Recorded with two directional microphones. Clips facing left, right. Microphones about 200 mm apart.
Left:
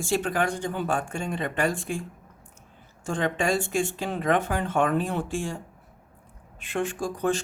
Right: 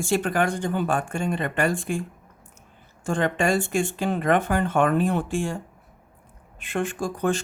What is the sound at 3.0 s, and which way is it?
Speech, 55° right (ahead or behind).